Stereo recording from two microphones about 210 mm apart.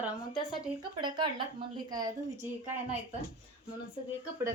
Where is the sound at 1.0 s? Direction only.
20° right (ahead or behind).